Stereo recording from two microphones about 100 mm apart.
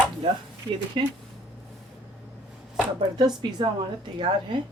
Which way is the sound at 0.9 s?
55° right (ahead or behind).